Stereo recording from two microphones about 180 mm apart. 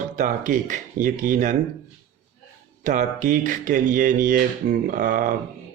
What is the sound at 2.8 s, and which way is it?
A man's voice, 45° right (ahead or behind).